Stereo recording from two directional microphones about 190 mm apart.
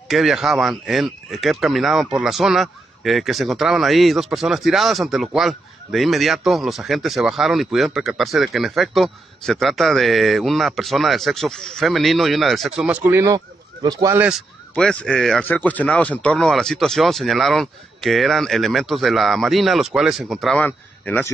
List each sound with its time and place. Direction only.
0.1 s speech: centre (ahead or behind); by 14.1 s 20° right (ahead or behind)
14.8 s speech: 5° left (ahead or behind)